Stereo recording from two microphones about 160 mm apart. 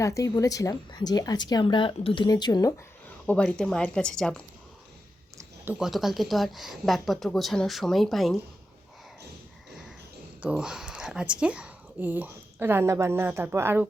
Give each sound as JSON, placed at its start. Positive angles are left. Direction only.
{"t": 0.0, "sound": "speech", "side_deg": 20}
{"t": 3.2, "sound": "speech", "side_deg": 5}
{"t": 5.4, "sound": "speech", "side_deg": -10}
{"t": 10.4, "sound": "speech", "side_deg": -5}